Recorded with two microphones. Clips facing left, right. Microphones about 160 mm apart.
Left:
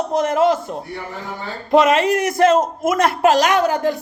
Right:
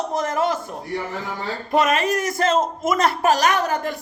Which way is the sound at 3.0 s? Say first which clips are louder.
Left 4 dB; 55° left (ahead or behind).